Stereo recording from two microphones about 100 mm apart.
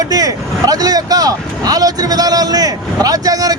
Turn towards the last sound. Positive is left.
turn(degrees=-35)  # may be behind; listen again after turning